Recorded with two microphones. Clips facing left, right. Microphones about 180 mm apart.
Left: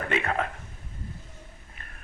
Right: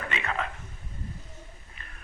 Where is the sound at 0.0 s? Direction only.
50° left (ahead or behind).